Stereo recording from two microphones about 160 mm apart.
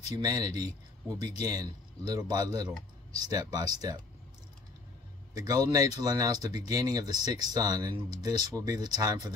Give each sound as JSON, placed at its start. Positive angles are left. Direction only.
{"t": 0.2, "sound": "speech", "side_deg": -25}
{"t": 5.4, "sound": "speech", "side_deg": -20}